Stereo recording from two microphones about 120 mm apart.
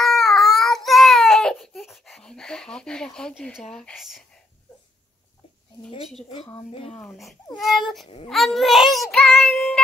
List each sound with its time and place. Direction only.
0.0 s child singing: centre (ahead or behind)
0.5 s baby cry: 5° left (ahead or behind)
3.7 s a child's voice: centre (ahead or behind)
6.7 s speech: 50° left (ahead or behind)
7.5 s a child's voice: centre (ahead or behind)
9.4 s music: centre (ahead or behind)